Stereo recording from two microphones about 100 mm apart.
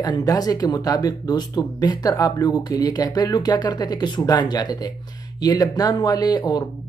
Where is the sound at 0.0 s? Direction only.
40° left (ahead or behind).